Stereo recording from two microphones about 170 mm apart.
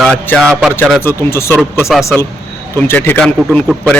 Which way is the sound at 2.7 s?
15° left (ahead or behind).